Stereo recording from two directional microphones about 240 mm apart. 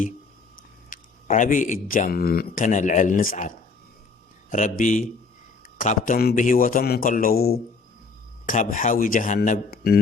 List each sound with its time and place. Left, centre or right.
0.9 s speech: left